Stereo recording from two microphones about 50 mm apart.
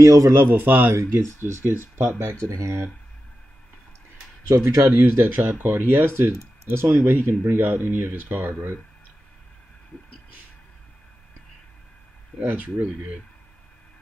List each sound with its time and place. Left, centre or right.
0.0 s a man's voice: right
0.4 s speech: right
0.9 s speech: right
1.6 s speech: right
2.5 s speech: right
4.5 s a man's voice: right
4.8 s speech: right
7.0 s speech: right
12.4 s speech: right